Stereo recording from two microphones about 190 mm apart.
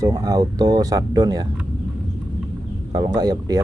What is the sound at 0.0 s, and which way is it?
Speech, 20° right (ahead or behind).